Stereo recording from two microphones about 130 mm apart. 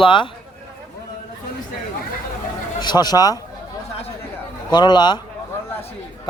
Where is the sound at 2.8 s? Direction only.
35° left (ahead or behind).